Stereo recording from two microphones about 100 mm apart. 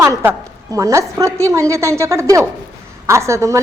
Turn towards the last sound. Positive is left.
turn(degrees=-30)  # may be behind; listen again after turning